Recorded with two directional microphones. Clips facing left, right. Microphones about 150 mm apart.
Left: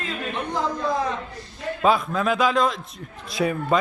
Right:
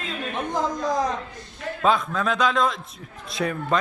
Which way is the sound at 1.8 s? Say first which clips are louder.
Left 1 dB; 5° left (ahead or behind).